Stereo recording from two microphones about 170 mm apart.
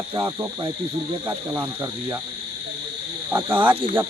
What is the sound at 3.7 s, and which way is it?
Speech, 30° right (ahead or behind).